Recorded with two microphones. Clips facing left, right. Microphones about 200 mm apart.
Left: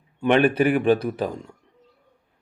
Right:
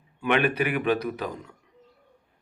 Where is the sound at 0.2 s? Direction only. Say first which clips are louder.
Left 6 dB; 30° left (ahead or behind).